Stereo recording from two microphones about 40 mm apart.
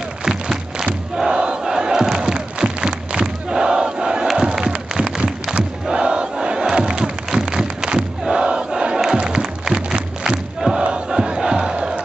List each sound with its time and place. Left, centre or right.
0.2 s music: centre
1.3 s battle cry: right
1.6 s crowd: centre
9.2 s music: right
10.2 s crowd: centre